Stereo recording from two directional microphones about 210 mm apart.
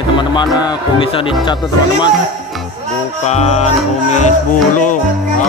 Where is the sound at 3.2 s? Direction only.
30° left (ahead or behind).